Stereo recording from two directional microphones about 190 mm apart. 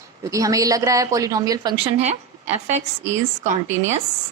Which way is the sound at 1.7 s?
30° right (ahead or behind).